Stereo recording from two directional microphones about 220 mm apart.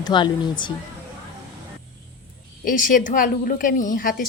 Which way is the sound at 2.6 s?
40° left (ahead or behind).